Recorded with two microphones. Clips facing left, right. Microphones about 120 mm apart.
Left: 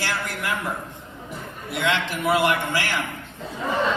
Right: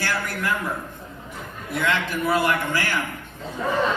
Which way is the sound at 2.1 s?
15° left (ahead or behind).